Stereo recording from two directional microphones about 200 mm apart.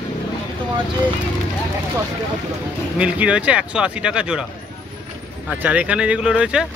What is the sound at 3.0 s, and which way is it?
Speech, 5° right (ahead or behind).